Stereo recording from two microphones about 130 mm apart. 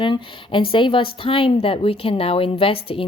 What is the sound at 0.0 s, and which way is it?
Speech, 40° left (ahead or behind).